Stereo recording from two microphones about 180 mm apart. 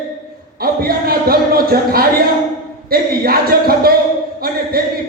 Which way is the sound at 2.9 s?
55° right (ahead or behind).